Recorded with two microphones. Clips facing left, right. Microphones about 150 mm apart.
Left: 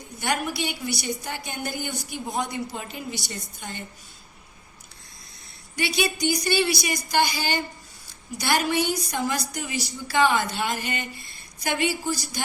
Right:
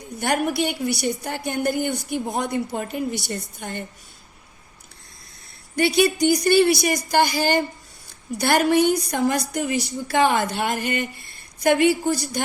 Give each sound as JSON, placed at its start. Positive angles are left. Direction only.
{"t": 0.2, "sound": "a woman's voice", "side_deg": -50}
{"t": 5.7, "sound": "a woman's voice", "side_deg": -55}